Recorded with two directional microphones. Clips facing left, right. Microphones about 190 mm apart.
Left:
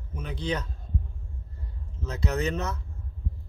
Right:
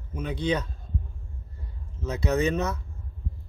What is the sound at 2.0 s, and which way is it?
Speech, 15° right (ahead or behind).